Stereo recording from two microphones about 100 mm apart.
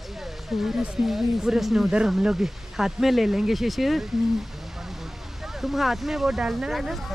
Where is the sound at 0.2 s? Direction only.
Centre (ahead or behind).